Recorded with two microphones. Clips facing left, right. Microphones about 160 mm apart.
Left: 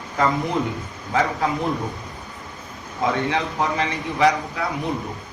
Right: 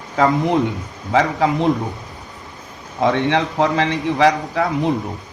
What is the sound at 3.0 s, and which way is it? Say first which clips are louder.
A man's voice: right 5 dB; 80° right.